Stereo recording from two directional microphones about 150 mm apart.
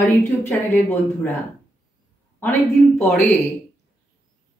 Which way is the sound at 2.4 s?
15° left (ahead or behind).